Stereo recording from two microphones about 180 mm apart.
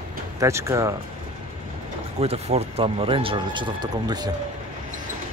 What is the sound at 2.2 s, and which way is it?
Speech, 35° right (ahead or behind).